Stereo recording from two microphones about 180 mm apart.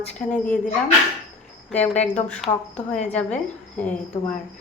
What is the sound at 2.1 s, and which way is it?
A woman's voice, 5° left (ahead or behind).